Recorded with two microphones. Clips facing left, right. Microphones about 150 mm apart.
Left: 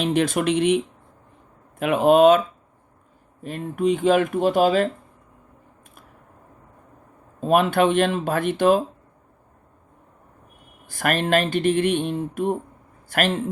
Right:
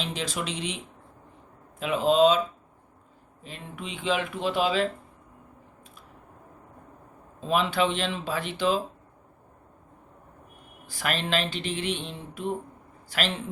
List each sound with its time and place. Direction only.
0.0 s speech: 55° left (ahead or behind)
1.8 s speech: 60° left (ahead or behind)
3.4 s speech: 50° left (ahead or behind)
7.4 s speech: 55° left (ahead or behind)
10.8 s a man's voice: 50° left (ahead or behind)